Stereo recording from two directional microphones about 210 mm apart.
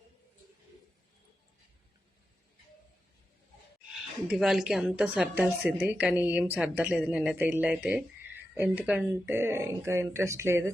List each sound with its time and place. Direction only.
3.9 s a woman's voice: centre (ahead or behind)